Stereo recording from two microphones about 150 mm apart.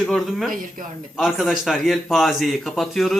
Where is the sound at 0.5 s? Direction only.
65° right (ahead or behind).